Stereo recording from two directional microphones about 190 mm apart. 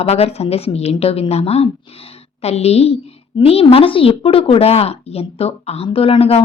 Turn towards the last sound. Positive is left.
turn(degrees=30)  # may be behind; listen again after turning